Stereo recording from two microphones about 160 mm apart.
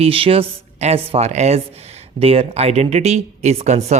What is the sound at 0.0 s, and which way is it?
Speech, 35° right (ahead or behind).